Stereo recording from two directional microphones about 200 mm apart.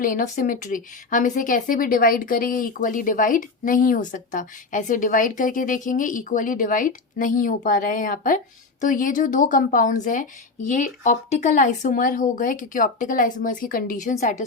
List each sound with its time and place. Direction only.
0.0 s a woman's voice: 40° left (ahead or behind)